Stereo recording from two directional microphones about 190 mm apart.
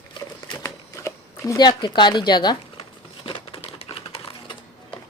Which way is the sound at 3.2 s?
25° left (ahead or behind).